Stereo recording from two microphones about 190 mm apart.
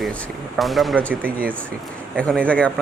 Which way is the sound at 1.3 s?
50° right (ahead or behind).